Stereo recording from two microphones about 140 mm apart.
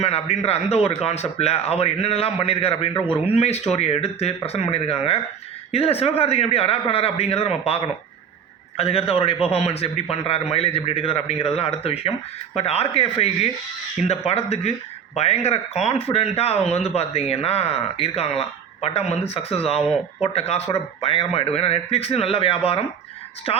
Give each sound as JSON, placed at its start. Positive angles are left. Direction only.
{"t": 0.0, "sound": "speech", "side_deg": 50}
{"t": 8.8, "sound": "speech", "side_deg": 45}